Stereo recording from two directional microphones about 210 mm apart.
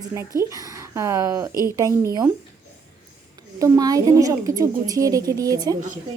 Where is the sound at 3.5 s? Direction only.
15° right (ahead or behind).